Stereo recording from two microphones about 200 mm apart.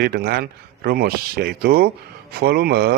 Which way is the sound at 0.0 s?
50° right (ahead or behind).